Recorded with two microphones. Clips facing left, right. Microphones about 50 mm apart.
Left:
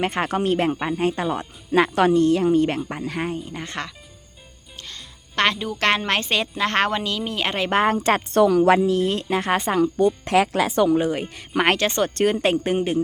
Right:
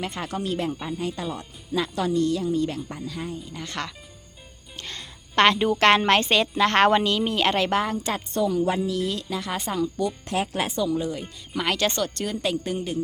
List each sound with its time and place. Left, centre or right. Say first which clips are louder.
0.0 s speech: left 7 dB; left
3.5 s speech: left 3 dB; left
4.8 s music: right 2 dB; right
5.4 s a woman's voice: right 3 dB; centre
6.8 s speech: right 4 dB; centre
7.3 s a woman's voice: right 1 dB; centre
7.9 s a woman's voice: left 8 dB; left
8.9 s speech: left 6 dB; left
10.2 s a woman's voice: left 7 dB; left
10.8 s speech: left 6 dB; left